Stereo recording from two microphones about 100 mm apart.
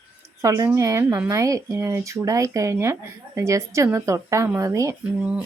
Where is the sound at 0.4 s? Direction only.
35° right (ahead or behind).